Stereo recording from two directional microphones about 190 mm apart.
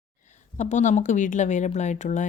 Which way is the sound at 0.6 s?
40° left (ahead or behind).